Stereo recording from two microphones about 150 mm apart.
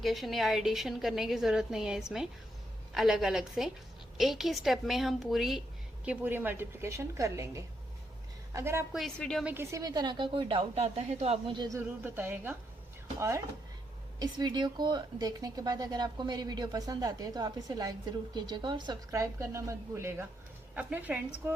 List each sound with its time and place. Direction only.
0.0 s a woman's voice: centre (ahead or behind)
6.1 s a woman's voice: 10° right (ahead or behind)
8.9 s a woman's voice: centre (ahead or behind)
9.4 s a woman's voice: 10° right (ahead or behind)
9.7 s a woman's voice: 25° right (ahead or behind); by 11.5 s 45° right (ahead or behind)
11.5 s speech: 30° right (ahead or behind)
11.8 s a woman's voice: 15° right (ahead or behind)